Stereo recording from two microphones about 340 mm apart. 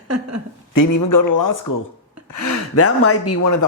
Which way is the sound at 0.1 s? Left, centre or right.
Right.